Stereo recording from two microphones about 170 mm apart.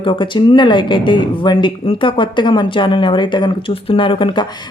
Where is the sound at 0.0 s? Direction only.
30° left (ahead or behind).